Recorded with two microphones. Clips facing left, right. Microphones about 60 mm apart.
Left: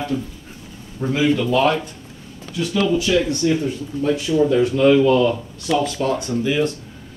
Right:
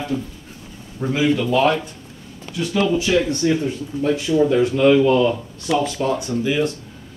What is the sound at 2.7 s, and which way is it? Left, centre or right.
Speech, right.